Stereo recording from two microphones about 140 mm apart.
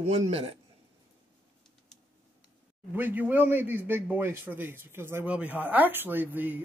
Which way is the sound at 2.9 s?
15° right (ahead or behind).